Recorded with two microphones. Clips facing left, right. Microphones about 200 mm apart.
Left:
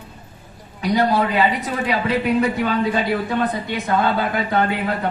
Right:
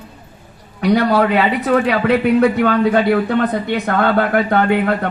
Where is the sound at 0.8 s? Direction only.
65° right (ahead or behind).